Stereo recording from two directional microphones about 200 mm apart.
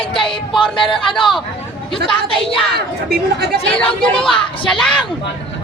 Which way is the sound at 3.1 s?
50° right (ahead or behind).